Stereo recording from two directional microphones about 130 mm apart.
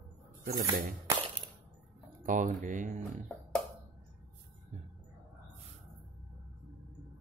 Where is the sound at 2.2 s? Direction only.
80° right.